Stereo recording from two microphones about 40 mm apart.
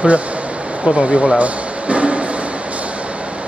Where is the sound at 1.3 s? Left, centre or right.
Right.